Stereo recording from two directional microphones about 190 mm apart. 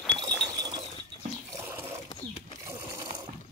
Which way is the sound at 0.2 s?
20° right (ahead or behind).